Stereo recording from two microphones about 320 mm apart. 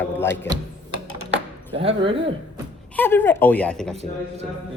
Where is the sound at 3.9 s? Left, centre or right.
Centre.